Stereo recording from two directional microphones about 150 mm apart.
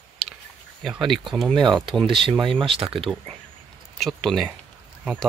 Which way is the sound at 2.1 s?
35° right (ahead or behind).